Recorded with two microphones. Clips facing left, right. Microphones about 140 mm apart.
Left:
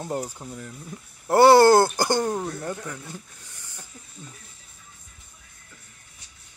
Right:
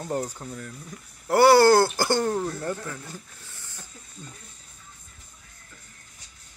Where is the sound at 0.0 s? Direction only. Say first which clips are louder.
Right 1 dB; 15° left (ahead or behind).